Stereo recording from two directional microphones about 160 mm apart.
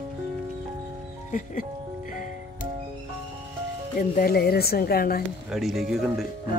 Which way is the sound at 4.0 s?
70° left (ahead or behind).